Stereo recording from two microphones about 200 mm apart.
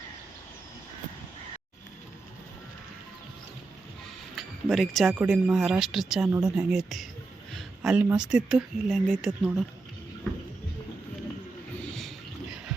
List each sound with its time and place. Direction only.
4.4 s speech: centre (ahead or behind)